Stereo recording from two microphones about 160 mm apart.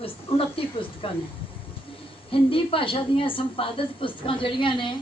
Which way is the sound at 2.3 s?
35° left (ahead or behind).